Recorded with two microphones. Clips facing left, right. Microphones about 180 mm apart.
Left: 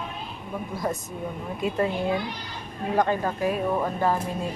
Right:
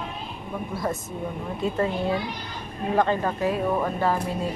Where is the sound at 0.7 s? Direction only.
15° left (ahead or behind).